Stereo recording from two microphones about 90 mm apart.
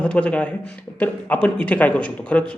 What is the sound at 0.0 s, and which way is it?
Speech, 15° left (ahead or behind).